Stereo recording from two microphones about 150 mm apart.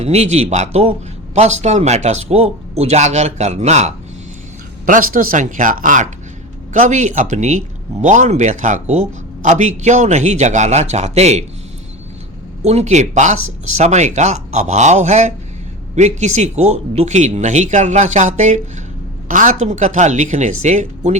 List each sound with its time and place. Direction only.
0.0 s a man's voice: 45° right (ahead or behind)
4.9 s a man's voice: 65° right (ahead or behind); by 11.4 s 45° right (ahead or behind)
12.6 s a man's voice: 50° right (ahead or behind)